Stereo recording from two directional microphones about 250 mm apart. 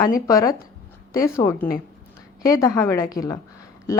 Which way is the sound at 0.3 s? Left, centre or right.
Centre.